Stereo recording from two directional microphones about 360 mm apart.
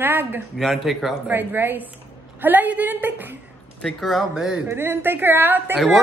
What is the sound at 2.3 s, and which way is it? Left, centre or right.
A woman's voice, centre.